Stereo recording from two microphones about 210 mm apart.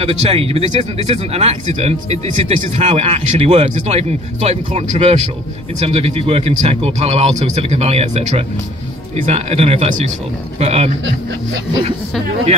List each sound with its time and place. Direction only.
0.0 s speech: 30° right (ahead or behind)